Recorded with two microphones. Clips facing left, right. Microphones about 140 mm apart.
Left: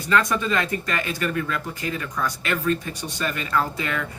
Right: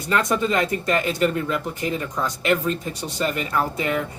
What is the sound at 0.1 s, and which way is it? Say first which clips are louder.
Speech: right 1 dB; 25° right (ahead or behind).